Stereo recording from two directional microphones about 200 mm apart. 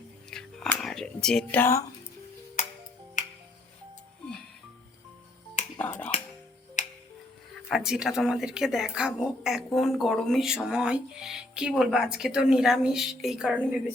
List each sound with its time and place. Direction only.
0.3 s whispering: 5° left (ahead or behind)
2.6 s music: 40° left (ahead or behind)
5.8 s music: 10° left (ahead or behind)
7.5 s speech: centre (ahead or behind)